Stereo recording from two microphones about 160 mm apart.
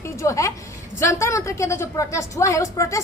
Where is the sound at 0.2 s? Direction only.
20° left (ahead or behind).